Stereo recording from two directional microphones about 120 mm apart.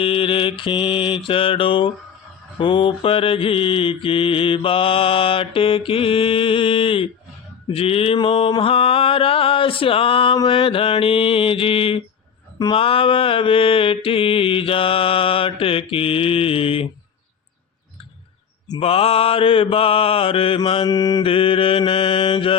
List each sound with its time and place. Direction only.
0.0 s mantra: 50° left (ahead or behind)
18.8 s mantra: 55° left (ahead or behind)
20.9 s mantra: 35° left (ahead or behind)
21.2 s mantra: 50° left (ahead or behind)